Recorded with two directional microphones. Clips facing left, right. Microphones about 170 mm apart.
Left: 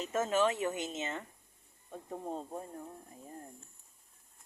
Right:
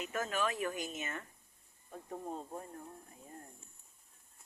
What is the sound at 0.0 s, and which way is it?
Speech, 30° left (ahead or behind).